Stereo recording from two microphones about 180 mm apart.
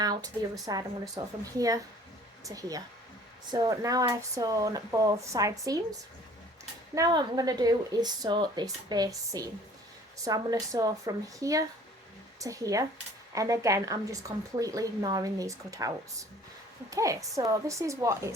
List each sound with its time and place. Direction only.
0.0 s a woman's voice: 20° right (ahead or behind)
6.9 s a woman's voice: 20° right (ahead or behind)
16.9 s a woman's voice: 20° right (ahead or behind)